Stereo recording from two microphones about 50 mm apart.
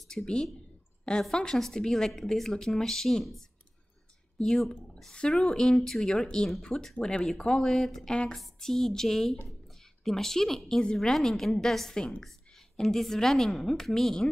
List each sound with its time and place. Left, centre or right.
0.1 s speech: centre